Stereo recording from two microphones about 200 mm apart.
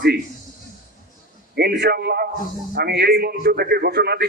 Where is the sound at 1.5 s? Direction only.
55° right (ahead or behind).